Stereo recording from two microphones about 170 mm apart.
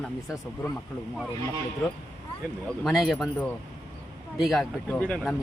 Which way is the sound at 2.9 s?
Centre (ahead or behind).